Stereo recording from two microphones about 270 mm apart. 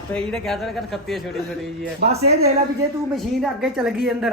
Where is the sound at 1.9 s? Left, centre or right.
Right.